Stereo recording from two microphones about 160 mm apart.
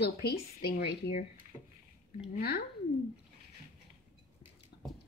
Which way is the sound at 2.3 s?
85° left.